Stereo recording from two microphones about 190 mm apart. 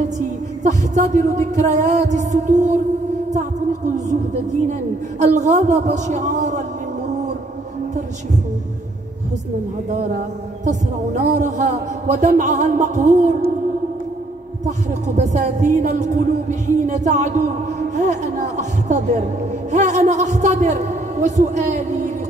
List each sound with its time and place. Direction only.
0.7 s a man's voice: 40° right (ahead or behind)
10.6 s a man's voice: 40° right (ahead or behind)
15.0 s a man's voice: 40° right (ahead or behind)